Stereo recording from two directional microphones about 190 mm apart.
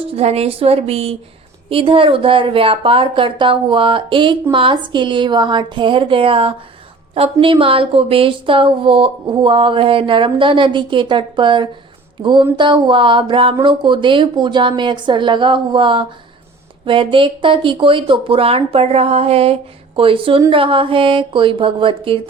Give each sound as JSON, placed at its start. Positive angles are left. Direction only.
{"t": 0.2, "sound": "a woman's voice", "side_deg": -30}